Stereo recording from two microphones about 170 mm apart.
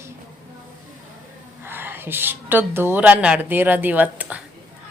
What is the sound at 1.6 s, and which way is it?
A woman's voice, 10° right (ahead or behind).